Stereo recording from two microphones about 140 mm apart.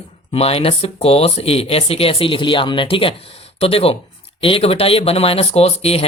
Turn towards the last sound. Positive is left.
turn(degrees=45)  # may be behind; listen again after turning